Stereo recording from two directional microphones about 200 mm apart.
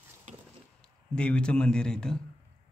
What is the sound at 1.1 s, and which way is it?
Speech, 5° left (ahead or behind).